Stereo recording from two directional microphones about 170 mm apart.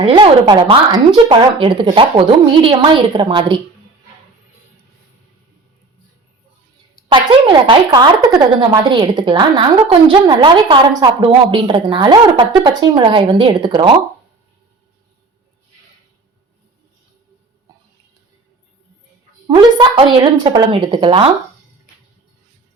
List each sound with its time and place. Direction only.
0.0 s a woman's voice: 30° right (ahead or behind)
7.1 s a woman's voice: 30° right (ahead or behind)
17.7 s a sound: 20° right (ahead or behind)
19.5 s a woman's voice: 25° right (ahead or behind)